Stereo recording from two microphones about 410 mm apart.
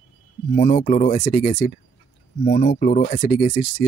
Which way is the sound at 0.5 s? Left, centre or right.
Centre.